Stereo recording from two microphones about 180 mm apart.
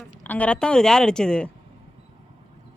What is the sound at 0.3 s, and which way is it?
A woman's voice, 10° left (ahead or behind).